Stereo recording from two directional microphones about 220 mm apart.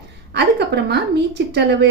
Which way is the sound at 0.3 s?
50° right (ahead or behind).